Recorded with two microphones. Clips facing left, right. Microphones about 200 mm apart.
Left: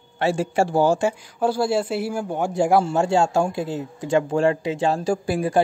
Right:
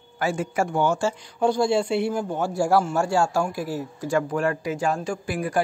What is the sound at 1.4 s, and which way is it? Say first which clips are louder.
Speech: right 1 dB; 5° left (ahead or behind).